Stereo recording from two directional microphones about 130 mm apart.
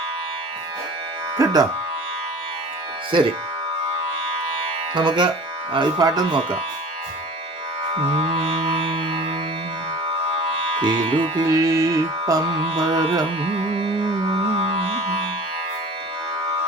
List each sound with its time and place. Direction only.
1.4 s speech: 30° right (ahead or behind)
3.1 s music: 40° right (ahead or behind)
4.9 s music: 40° right (ahead or behind)
8.0 s music: 50° right (ahead or behind)
10.3 s music: 40° right (ahead or behind)